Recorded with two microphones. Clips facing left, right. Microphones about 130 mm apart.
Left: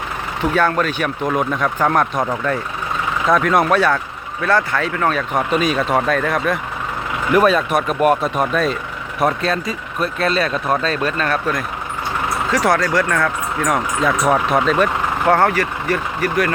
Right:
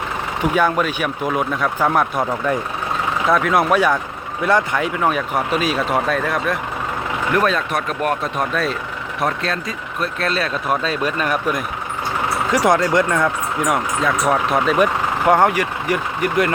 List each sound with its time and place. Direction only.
0.5 s speech: 10° right (ahead or behind)
3.8 s speech: 15° right (ahead or behind)
13.7 s speech: centre (ahead or behind); by 16.5 s 15° right (ahead or behind)